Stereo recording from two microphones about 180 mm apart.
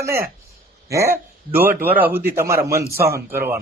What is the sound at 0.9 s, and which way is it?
Speech, 15° right (ahead or behind).